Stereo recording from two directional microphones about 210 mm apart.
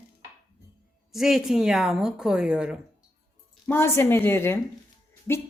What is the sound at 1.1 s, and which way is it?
A woman's voice, centre (ahead or behind).